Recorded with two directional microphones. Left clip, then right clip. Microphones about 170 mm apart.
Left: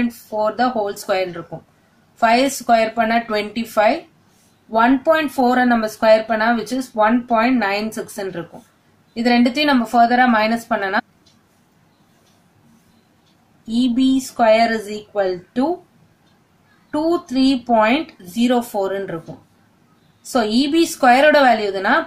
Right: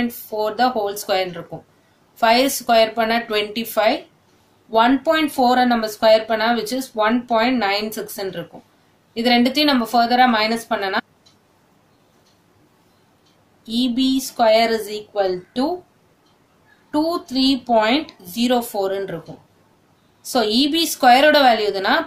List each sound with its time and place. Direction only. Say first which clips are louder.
0.4 s speech: left 1 dB; 25° left (ahead or behind)
13.7 s speech: left 2 dB; 30° left (ahead or behind)
16.9 s speech: left 2 dB; 30° left (ahead or behind)
20.2 s speech: even; 30° left (ahead or behind)